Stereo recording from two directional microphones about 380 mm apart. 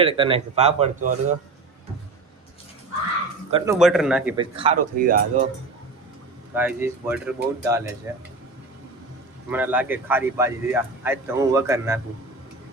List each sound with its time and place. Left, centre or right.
0.0 s speech: centre
3.5 s speech: centre
4.4 s speech: centre
6.5 s speech: centre
9.5 s speech: centre